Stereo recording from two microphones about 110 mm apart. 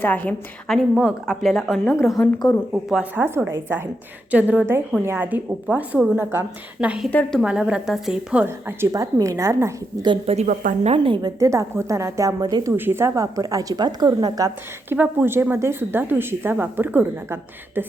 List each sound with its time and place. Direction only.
0.0 s a woman's voice: 15° left (ahead or behind)
0.7 s a woman's voice: 5° right (ahead or behind)
8.4 s a woman's voice: 25° right (ahead or behind)
10.2 s a woman's voice: 80° right
11.0 s a woman's voice: 45° right (ahead or behind)
11.3 s a woman's voice: 25° right (ahead or behind)
12.4 s speech: 40° right (ahead or behind)
12.6 s speech: 20° right (ahead or behind); by 14.4 s 40° right (ahead or behind)
14.9 s a woman's voice: 15° right (ahead or behind)